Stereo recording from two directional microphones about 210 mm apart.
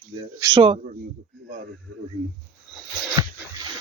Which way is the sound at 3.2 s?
15° right (ahead or behind).